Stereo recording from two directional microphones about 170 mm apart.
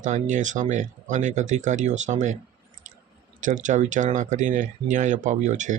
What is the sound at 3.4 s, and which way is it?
Speech, 50° right (ahead or behind).